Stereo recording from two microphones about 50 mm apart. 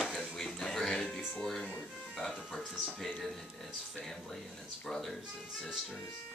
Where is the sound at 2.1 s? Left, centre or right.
Centre.